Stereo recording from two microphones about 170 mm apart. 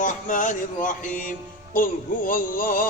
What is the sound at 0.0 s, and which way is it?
Music, 50° left (ahead or behind).